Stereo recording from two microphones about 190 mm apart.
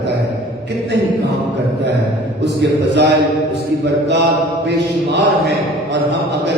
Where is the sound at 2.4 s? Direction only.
65° right (ahead or behind).